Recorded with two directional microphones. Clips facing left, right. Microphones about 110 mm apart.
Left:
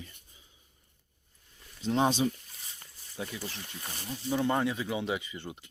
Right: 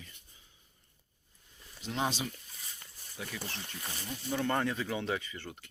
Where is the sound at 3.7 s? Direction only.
5° left (ahead or behind).